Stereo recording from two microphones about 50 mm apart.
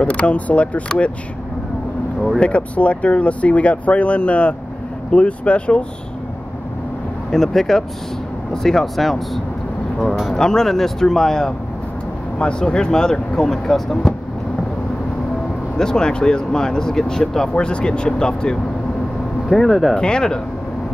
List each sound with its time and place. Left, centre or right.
0.0 s speech: left
2.4 s speech: left
7.2 s speech: centre
15.8 s speech: centre
19.5 s speech: centre
20.0 s speech: centre